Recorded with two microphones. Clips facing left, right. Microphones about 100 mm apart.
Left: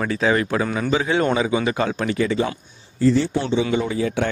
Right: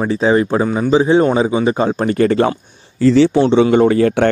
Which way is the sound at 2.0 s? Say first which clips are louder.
Right 9 dB; 50° right (ahead or behind).